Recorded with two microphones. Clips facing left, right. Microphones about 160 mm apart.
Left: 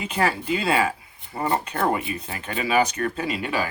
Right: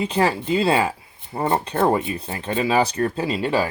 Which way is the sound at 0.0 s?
30° right (ahead or behind).